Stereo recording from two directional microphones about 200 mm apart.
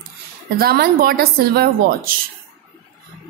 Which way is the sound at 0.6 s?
50° right (ahead or behind).